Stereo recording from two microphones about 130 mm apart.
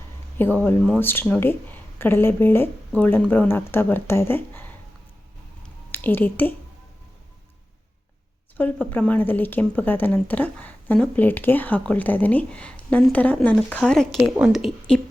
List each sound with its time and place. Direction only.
0.3 s speech: 15° left (ahead or behind)
5.6 s a sound: 15° left (ahead or behind)
8.5 s a woman's voice: 15° left (ahead or behind)